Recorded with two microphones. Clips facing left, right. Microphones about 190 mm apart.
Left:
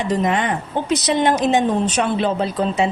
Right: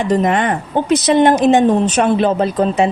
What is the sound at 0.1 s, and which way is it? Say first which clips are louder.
Speech: right 4 dB; 55° right (ahead or behind).